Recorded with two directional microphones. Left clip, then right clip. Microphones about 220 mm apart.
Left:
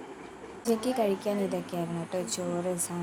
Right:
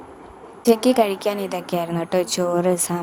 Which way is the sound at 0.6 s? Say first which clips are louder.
Right 11 dB; 40° right (ahead or behind).